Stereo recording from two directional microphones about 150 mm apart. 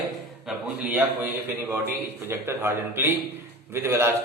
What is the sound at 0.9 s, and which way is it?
A man's voice, 10° right (ahead or behind).